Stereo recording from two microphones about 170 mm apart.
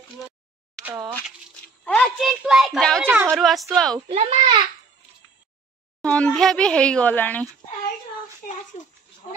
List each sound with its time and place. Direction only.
0.8 s speech: 20° right (ahead or behind)
1.9 s a child's voice: 5° left (ahead or behind)
3.0 s a woman's voice: 10° right (ahead or behind)
4.1 s a child's voice: 40° right (ahead or behind)
6.0 s speech: 5° left (ahead or behind)